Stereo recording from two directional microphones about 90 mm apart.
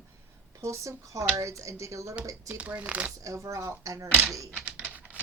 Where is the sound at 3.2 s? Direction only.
35° right (ahead or behind).